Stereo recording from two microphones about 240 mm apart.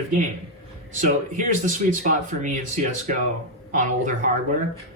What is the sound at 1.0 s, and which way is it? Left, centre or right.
Speech, right.